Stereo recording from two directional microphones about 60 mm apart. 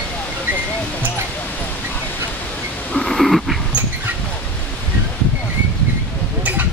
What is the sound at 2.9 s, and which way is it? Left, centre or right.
Cat, centre.